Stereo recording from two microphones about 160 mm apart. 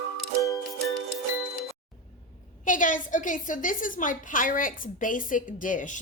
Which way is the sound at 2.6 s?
55° left (ahead or behind).